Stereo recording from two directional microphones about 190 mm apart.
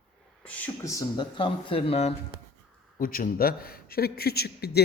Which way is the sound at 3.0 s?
50° left (ahead or behind).